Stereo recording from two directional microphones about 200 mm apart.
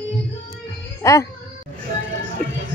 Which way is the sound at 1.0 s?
15° left (ahead or behind).